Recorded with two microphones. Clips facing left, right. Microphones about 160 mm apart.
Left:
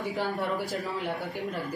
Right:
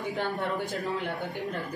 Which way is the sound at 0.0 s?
Centre (ahead or behind).